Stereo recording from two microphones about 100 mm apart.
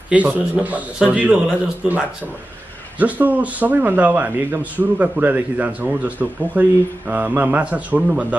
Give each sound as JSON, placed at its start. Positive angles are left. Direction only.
{"t": 0.1, "sound": "a man's voice", "side_deg": -15}
{"t": 3.0, "sound": "a man's voice", "side_deg": -15}